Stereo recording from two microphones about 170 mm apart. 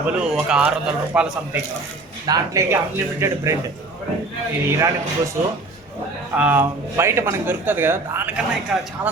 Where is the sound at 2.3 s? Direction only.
20° right (ahead or behind).